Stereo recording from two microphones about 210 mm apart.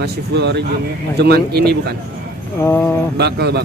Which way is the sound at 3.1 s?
50° right (ahead or behind).